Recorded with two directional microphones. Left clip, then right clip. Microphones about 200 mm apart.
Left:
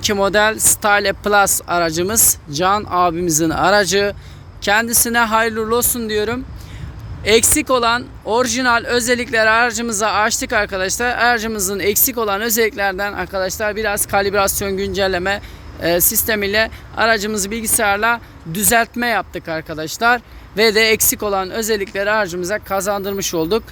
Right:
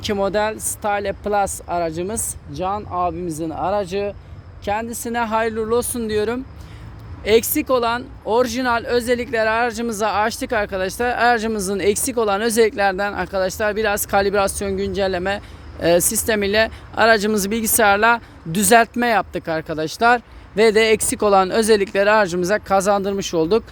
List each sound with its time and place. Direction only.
0.0 s speech: 5° right (ahead or behind)
15.8 s speech: 25° right (ahead or behind)